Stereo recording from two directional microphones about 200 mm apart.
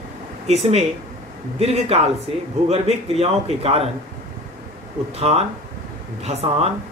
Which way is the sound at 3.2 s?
30° right (ahead or behind).